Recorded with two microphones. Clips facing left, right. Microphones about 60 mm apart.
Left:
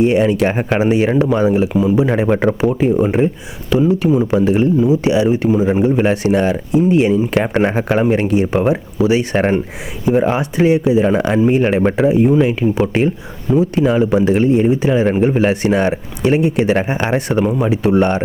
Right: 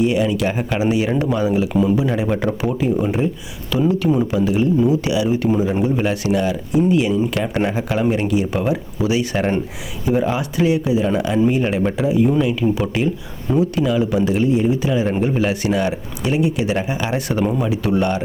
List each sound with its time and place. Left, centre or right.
0.0 s speech: left
1.1 s speech: left